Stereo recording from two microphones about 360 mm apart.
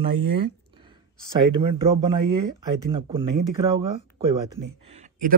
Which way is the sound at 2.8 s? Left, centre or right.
Centre.